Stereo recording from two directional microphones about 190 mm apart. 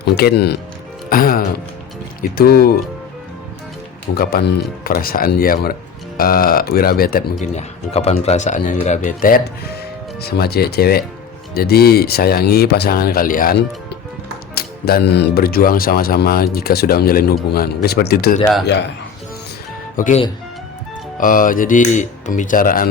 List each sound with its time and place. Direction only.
0.0 s speech: 60° left (ahead or behind)
4.1 s speech: 50° left (ahead or behind)
20.0 s speech: 40° left (ahead or behind)